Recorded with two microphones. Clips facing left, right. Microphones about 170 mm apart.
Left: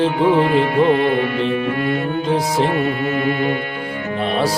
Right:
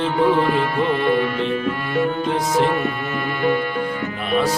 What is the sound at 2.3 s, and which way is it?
Music, 35° left (ahead or behind).